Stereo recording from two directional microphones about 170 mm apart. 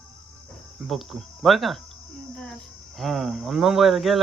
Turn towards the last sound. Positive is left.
turn(degrees=0)  # may be behind; listen again after turning